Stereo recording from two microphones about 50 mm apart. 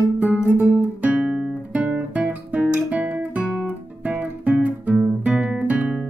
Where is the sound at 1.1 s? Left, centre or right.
Centre.